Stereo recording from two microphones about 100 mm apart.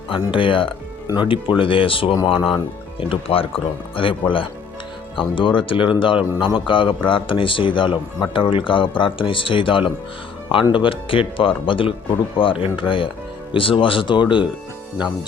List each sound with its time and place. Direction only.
0.1 s speech: 60° left (ahead or behind)